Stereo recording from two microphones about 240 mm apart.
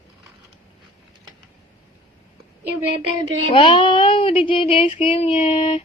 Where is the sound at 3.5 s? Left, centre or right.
Left.